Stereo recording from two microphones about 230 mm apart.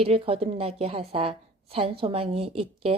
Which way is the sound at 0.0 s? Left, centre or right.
Right.